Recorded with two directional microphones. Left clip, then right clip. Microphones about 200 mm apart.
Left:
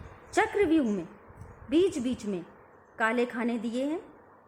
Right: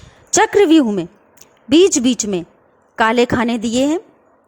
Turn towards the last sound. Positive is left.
turn(degrees=-40)  # may be behind; listen again after turning